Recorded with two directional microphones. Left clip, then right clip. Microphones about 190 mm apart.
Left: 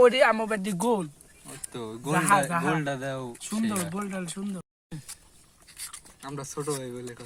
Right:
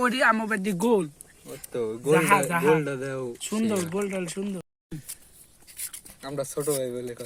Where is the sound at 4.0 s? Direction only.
15° left (ahead or behind).